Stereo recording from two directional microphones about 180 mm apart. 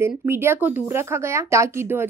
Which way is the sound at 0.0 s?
15° right (ahead or behind).